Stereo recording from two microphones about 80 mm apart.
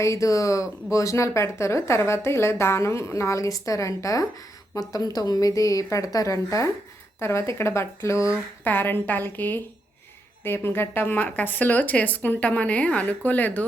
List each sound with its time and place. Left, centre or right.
0.0 s a woman's voice: left
8.6 s speech: left